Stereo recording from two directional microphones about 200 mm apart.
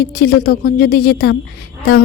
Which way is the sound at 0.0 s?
50° left (ahead or behind).